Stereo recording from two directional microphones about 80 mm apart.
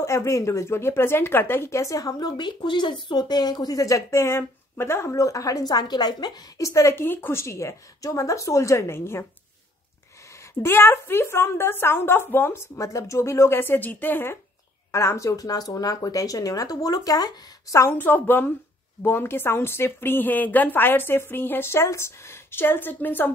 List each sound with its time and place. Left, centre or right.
0.0 s speech: left
6.6 s a woman's voice: left
7.0 s a woman's voice: left
10.6 s a woman's voice: left
14.9 s speech: left
17.9 s a woman's voice: left